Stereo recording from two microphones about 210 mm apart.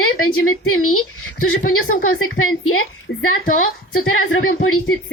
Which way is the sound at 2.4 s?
80° left.